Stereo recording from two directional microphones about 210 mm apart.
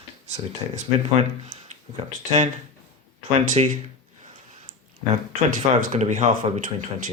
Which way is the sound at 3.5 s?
35° right (ahead or behind).